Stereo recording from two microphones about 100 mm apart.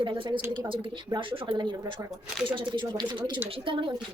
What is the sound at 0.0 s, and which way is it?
Speech, 55° right (ahead or behind).